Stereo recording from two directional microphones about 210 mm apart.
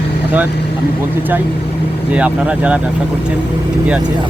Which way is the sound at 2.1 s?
5° right (ahead or behind).